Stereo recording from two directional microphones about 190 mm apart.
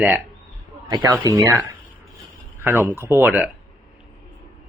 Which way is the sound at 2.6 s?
10° right (ahead or behind).